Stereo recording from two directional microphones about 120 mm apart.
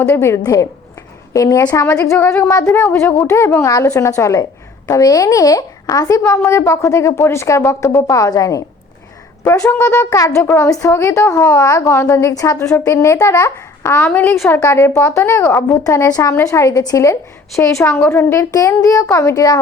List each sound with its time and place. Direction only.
0.0 s a woman's voice: 20° left (ahead or behind)